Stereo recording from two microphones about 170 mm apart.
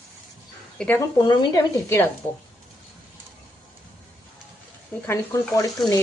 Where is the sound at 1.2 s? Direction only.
25° left (ahead or behind).